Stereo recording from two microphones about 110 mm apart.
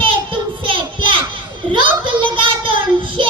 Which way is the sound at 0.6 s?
50° right (ahead or behind).